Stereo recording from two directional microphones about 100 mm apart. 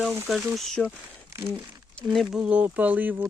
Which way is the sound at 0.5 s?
Centre (ahead or behind).